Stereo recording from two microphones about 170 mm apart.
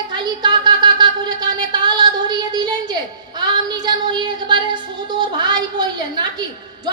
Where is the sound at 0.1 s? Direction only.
25° right (ahead or behind).